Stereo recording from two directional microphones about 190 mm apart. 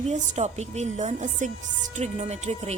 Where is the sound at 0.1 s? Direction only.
35° right (ahead or behind).